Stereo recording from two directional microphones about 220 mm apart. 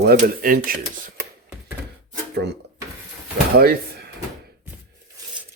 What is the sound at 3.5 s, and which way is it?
Speech, 45° right (ahead or behind).